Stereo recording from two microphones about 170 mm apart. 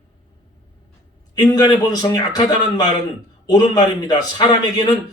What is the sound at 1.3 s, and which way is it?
A man's voice, 20° left (ahead or behind).